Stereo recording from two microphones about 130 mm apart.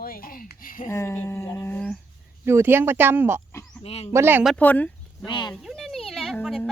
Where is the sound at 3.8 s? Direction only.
50° left (ahead or behind).